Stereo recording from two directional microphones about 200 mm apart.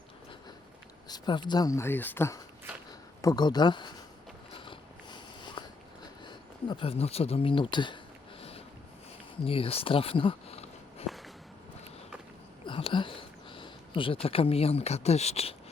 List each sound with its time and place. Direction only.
1.0 s speech: 20° left (ahead or behind)
4.5 s biting: 25° left (ahead or behind)
6.2 s speech: 25° left (ahead or behind)
8.4 s a sound: 30° left (ahead or behind)
9.4 s speech: 30° left (ahead or behind)
12.6 s a sound: 25° left (ahead or behind)